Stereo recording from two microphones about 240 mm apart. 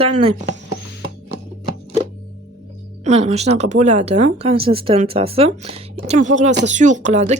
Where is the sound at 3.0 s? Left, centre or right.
Right.